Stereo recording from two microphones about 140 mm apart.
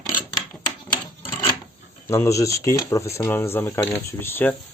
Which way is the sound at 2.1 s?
20° left (ahead or behind).